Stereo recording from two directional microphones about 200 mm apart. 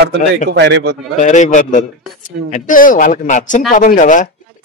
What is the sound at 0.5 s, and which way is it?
Speech, 60° right (ahead or behind).